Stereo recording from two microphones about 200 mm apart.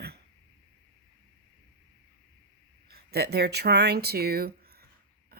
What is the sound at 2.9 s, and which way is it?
Speech, 50° right (ahead or behind).